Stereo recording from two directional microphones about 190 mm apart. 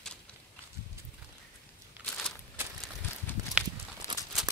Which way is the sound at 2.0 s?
5° left (ahead or behind).